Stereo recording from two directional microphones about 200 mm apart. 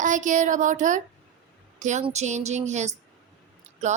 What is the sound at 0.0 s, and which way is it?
Speech, 40° right (ahead or behind).